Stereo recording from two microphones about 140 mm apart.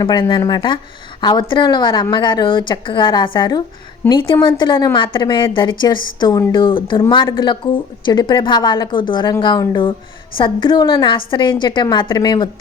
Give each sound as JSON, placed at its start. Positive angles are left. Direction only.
{"t": 0.0, "sound": "a woman's voice", "side_deg": 35}